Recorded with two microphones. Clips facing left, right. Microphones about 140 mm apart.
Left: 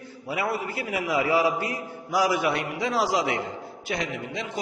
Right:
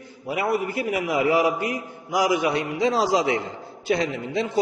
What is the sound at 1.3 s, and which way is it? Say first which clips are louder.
Speech: right 2 dB; 30° left (ahead or behind).